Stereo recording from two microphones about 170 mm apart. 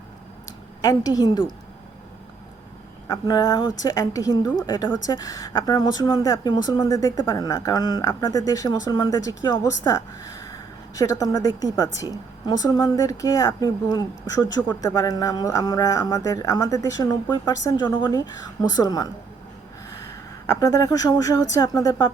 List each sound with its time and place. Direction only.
0.8 s a woman's voice: 20° left (ahead or behind)
3.1 s a woman's voice: 20° left (ahead or behind)
20.1 s a woman's voice: 20° left (ahead or behind)